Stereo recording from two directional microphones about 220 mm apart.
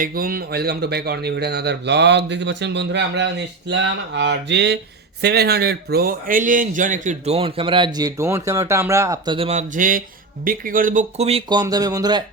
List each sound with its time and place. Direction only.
0.0 s a man's voice: 40° right (ahead or behind); by 12.2 s 15° right (ahead or behind)